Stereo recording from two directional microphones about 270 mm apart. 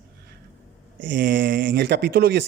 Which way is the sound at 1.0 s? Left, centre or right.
Right.